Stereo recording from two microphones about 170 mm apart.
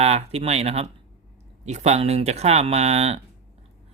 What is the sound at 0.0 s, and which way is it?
Speech, 40° right (ahead or behind).